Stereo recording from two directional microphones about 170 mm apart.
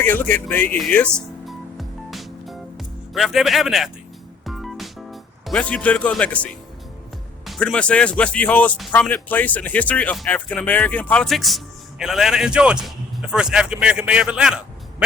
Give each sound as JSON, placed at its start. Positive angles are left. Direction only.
{"t": 0.0, "sound": "music", "side_deg": 10}
{"t": 7.4, "sound": "a man's voice", "side_deg": 5}